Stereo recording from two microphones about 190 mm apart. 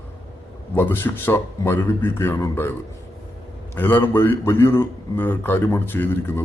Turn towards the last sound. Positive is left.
turn(degrees=10)  # may be behind; listen again after turning